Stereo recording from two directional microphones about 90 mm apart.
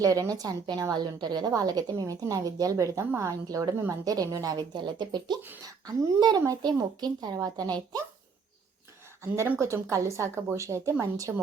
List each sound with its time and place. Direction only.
0.0 s a woman's voice: 40° right (ahead or behind)
4.5 s a woman's voice: 55° right (ahead or behind)
9.6 s a woman's voice: 30° right (ahead or behind)
11.3 s a woman's voice: 10° right (ahead or behind)